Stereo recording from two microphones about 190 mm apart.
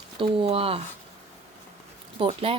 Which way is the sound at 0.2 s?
30° right (ahead or behind).